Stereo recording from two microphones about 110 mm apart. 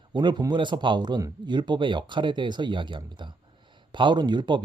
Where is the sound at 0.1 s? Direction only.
45° right (ahead or behind).